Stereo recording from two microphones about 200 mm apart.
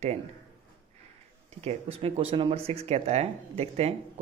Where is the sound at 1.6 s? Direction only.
30° right (ahead or behind).